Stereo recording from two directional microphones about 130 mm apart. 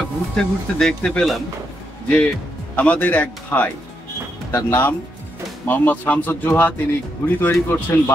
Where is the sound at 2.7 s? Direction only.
10° left (ahead or behind).